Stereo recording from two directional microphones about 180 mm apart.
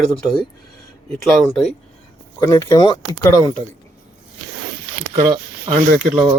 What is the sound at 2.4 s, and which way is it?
Speech, 15° left (ahead or behind).